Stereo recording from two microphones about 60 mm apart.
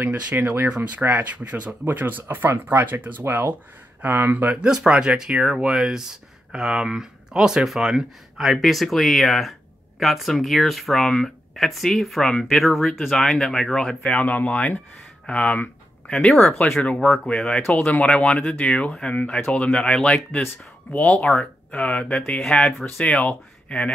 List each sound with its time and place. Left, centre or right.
0.4 s speech: right
0.7 s speech: right
4.6 s speech: centre
14.0 s speech: left
17.0 s speech: centre
17.3 s speech: centre
20.9 s speech: left
21.2 s speech: centre